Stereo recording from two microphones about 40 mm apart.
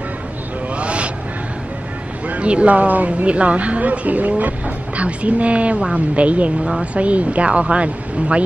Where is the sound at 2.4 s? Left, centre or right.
Right.